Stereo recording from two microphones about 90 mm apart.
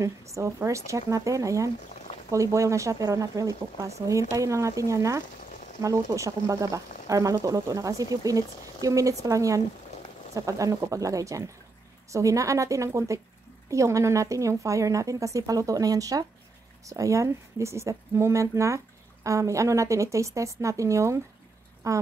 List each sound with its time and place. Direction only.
0.0 s speech: 35° right (ahead or behind)